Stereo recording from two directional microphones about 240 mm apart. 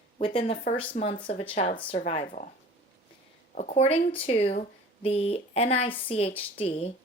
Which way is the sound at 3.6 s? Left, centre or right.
Left.